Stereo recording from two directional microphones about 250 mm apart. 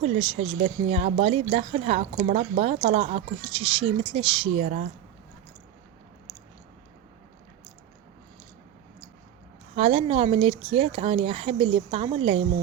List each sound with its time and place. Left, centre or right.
0.0 s speech: right
9.7 s speech: right